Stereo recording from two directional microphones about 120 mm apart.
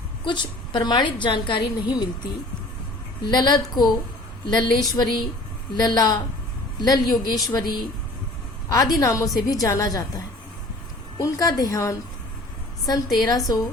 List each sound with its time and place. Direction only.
0.3 s a woman's voice: 40° left (ahead or behind)
3.2 s a woman's voice: 35° left (ahead or behind)
11.2 s a woman's voice: 30° left (ahead or behind)